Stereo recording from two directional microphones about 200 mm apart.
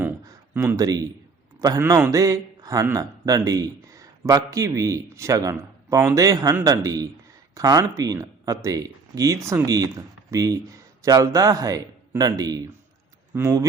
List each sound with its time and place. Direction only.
0.5 s speech: 15° right (ahead or behind)